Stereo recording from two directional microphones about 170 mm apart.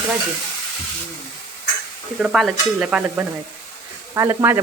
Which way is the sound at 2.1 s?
Centre (ahead or behind).